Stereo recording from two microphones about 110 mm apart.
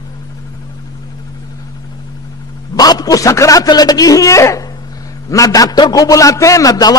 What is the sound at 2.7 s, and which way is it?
A man's voice, 35° left (ahead or behind).